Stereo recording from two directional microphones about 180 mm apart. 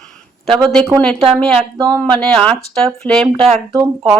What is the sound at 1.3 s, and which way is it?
Speech, 5° left (ahead or behind).